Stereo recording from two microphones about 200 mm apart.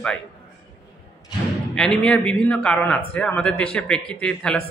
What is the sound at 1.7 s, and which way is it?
Speech, 5° left (ahead or behind).